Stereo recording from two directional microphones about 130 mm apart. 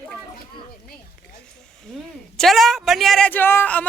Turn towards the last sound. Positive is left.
turn(degrees=15)  # may be behind; listen again after turning